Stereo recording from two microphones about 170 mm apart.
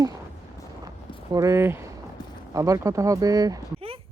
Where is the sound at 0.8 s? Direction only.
20° right (ahead or behind).